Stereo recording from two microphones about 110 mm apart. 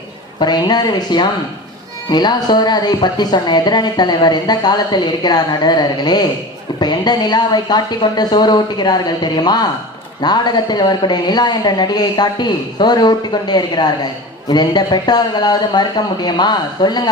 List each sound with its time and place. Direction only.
0.3 s speech: 40° left (ahead or behind)